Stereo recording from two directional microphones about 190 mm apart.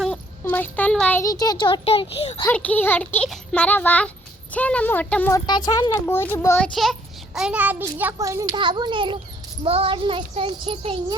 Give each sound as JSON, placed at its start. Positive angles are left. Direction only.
{"t": 0.0, "sound": "a sound", "side_deg": 5}
{"t": 1.2, "sound": "a child's voice", "side_deg": 20}
{"t": 2.4, "sound": "speech", "side_deg": 10}
{"t": 5.5, "sound": "a child's voice", "side_deg": 20}
{"t": 6.1, "sound": "speech", "side_deg": 10}
{"t": 7.3, "sound": "a child's voice", "side_deg": -5}